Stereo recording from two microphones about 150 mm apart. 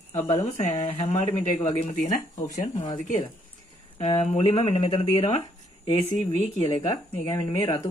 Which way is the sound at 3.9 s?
45° left (ahead or behind).